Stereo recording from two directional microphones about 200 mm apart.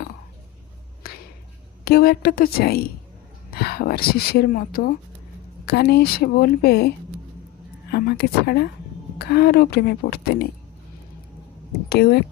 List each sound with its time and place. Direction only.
1.0 s a sound: 50° left (ahead or behind)
1.8 s speech: 50° left (ahead or behind)
11.9 s speech: 55° left (ahead or behind)